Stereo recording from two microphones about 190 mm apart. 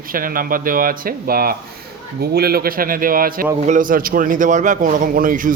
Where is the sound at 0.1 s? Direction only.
50° right (ahead or behind).